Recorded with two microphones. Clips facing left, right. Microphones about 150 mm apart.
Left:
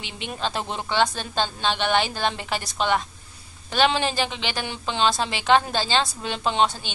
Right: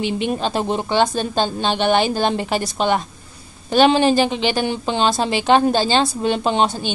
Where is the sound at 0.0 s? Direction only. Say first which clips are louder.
Right 10 dB; 45° right (ahead or behind).